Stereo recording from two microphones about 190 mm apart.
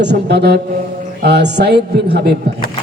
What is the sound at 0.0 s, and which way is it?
A man's voice, 60° right (ahead or behind).